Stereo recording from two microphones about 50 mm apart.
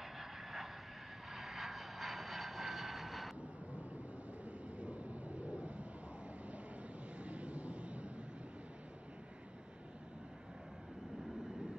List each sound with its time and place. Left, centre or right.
0.2 s vehicle: centre
4.5 s vehicle: right
7.2 s vehicle: right